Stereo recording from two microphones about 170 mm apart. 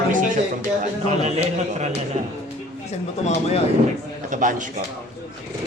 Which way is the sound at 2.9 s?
40° left (ahead or behind).